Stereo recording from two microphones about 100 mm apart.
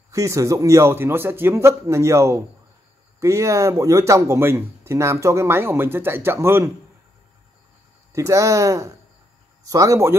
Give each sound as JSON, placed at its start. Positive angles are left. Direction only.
{"t": 0.1, "sound": "a man's voice", "side_deg": -30}
{"t": 8.1, "sound": "a man's voice", "side_deg": -30}